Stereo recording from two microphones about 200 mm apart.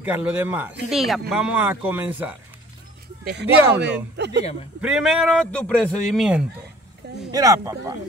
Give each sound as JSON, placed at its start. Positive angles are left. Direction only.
{"t": 0.0, "sound": "speech", "side_deg": -10}
{"t": 3.3, "sound": "speech", "side_deg": -55}
{"t": 4.2, "sound": "a sound", "side_deg": -60}
{"t": 4.8, "sound": "speech", "side_deg": -5}
{"t": 7.3, "sound": "speech", "side_deg": -15}